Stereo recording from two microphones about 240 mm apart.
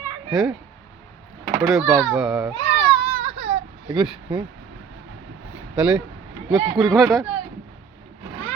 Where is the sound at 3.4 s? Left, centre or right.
Right.